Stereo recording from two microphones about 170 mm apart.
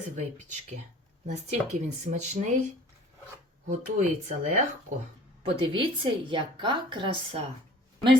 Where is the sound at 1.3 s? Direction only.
45° right (ahead or behind).